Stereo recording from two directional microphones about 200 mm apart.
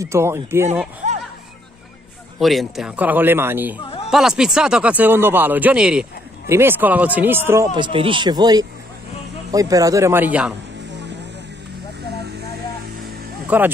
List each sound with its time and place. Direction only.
0.0 s a man's voice: 15° right (ahead or behind)
2.4 s a man's voice: centre (ahead or behind)
3.8 s a sound: 30° left (ahead or behind)
4.1 s a man's voice: 5° right (ahead or behind)
7.7 s a man's voice: 25° right (ahead or behind); by 10.5 s 5° right (ahead or behind)
13.5 s a man's voice: 5° right (ahead or behind)